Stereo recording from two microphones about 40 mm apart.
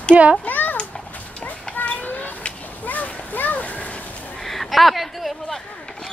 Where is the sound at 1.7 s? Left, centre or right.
Left.